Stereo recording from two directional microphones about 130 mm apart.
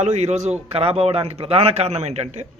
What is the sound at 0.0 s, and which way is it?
Speech, 60° right (ahead or behind).